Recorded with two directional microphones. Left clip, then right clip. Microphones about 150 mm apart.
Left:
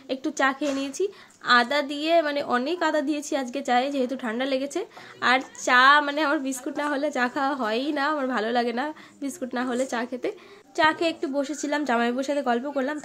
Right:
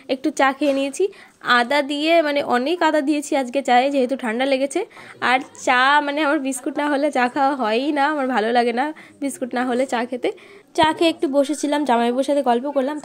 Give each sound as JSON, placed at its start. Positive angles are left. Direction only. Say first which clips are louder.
{"t": 0.1, "sound": "a woman's voice", "louder": "right 6 dB", "side_deg": -35}